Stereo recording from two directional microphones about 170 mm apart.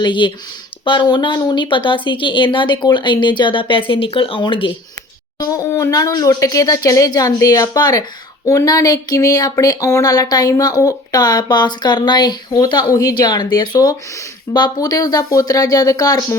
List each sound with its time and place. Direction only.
0.0 s speech: 30° left (ahead or behind)